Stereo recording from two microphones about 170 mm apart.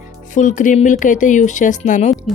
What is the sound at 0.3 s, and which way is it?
Speech, 50° left (ahead or behind).